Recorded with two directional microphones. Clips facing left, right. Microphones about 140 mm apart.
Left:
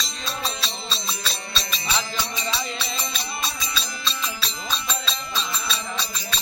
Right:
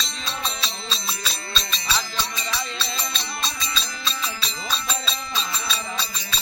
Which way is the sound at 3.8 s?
Centre (ahead or behind).